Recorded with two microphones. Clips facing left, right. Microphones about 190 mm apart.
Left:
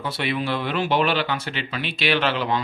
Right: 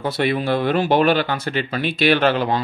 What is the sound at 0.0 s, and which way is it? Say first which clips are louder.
Speech: right 5 dB; 45° right (ahead or behind).